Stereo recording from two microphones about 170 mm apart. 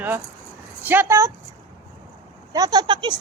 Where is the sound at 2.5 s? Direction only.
25° right (ahead or behind).